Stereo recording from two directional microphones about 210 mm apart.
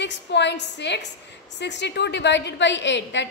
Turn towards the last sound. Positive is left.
turn(degrees=55)  # may be behind; listen again after turning